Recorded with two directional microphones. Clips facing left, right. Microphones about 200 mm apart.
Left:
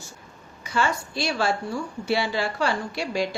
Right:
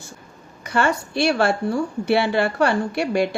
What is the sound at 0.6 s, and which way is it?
A woman's voice, 60° right (ahead or behind).